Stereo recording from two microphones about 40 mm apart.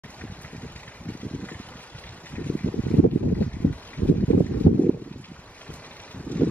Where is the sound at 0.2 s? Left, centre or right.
Left.